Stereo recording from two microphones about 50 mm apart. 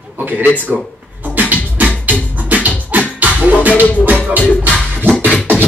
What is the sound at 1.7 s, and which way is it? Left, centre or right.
Music, right.